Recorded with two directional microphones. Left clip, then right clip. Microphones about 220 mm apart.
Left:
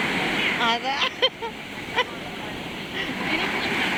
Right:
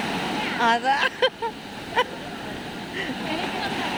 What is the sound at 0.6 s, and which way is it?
Vehicle, 25° right (ahead or behind).